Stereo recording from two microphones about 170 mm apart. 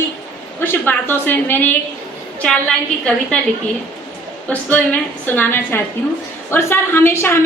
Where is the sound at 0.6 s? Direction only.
15° left (ahead or behind).